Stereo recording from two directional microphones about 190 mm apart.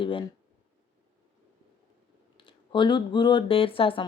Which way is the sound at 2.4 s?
25° left (ahead or behind).